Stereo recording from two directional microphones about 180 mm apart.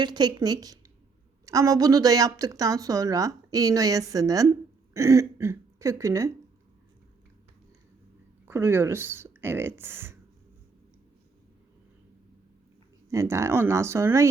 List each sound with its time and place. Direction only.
0.0 s a woman's voice: 25° right (ahead or behind)
8.4 s speech: 15° right (ahead or behind)
13.1 s speech: 15° right (ahead or behind)